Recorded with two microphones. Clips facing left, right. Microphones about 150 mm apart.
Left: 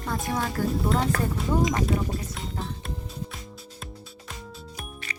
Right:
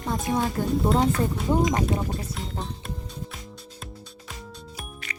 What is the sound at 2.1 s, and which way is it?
Music, centre (ahead or behind).